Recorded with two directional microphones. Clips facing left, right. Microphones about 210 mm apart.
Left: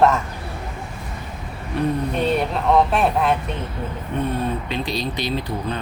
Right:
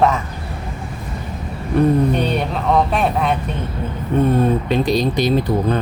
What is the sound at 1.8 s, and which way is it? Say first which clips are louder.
Speech: right 7 dB; 50° right (ahead or behind).